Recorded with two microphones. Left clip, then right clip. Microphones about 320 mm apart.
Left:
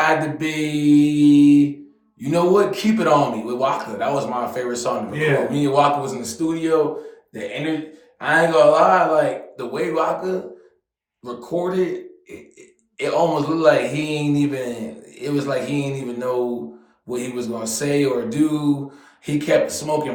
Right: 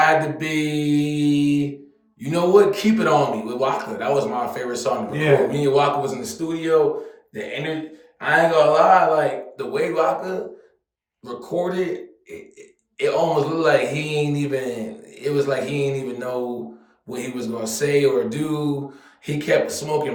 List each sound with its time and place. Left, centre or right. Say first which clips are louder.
0.0 s speech: right 1 dB; centre